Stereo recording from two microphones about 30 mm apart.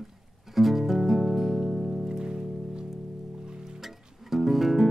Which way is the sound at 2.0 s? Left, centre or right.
Right.